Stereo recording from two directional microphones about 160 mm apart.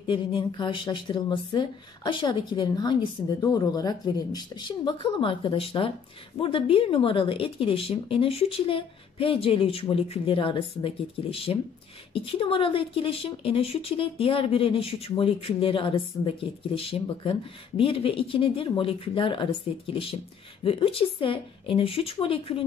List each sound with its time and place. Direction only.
0.0 s speech: 30° left (ahead or behind)